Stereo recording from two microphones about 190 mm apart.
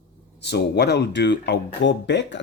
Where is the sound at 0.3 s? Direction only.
60° left (ahead or behind).